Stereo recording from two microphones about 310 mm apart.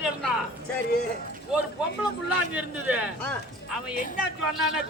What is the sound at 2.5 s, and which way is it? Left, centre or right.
Speech, centre.